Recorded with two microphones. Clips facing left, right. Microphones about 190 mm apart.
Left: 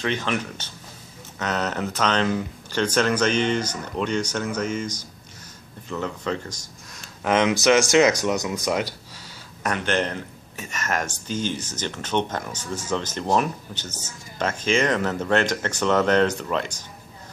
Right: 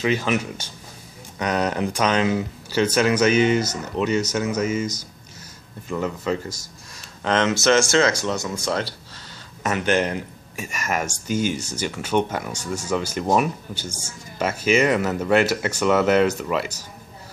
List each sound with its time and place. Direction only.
0.0 s speech: 5° right (ahead or behind)
5.9 s speech: 5° right (ahead or behind)
7.2 s speech: 10° left (ahead or behind)
9.6 s speech: 5° right (ahead or behind)